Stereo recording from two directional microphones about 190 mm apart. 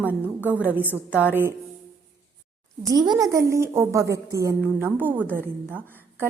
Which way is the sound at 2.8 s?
20° right (ahead or behind).